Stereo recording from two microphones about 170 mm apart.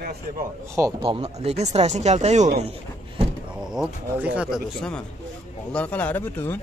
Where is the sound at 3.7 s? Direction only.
5° right (ahead or behind).